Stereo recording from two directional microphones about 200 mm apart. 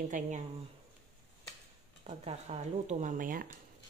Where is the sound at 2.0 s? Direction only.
30° right (ahead or behind).